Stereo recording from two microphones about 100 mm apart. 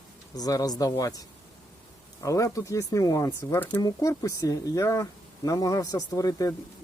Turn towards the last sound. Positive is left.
turn(degrees=35)  # may be behind; listen again after turning